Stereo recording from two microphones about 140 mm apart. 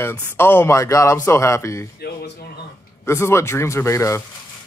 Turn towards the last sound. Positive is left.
turn(degrees=20)  # may be behind; listen again after turning